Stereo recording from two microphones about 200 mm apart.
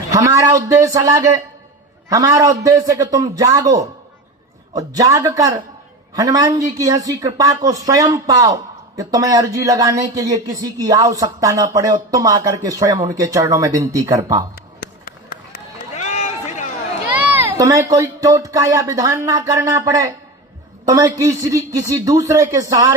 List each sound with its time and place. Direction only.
0.1 s speech: 15° right (ahead or behind)
14.8 s a sound: 45° left (ahead or behind)
16.0 s run: 35° left (ahead or behind)
17.2 s speech: 10° right (ahead or behind)